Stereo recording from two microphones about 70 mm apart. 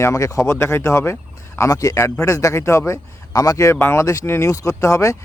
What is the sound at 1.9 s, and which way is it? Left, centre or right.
Speech, left.